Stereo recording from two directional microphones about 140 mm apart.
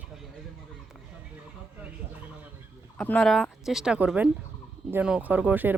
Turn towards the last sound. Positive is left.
turn(degrees=-15)  # may be behind; listen again after turning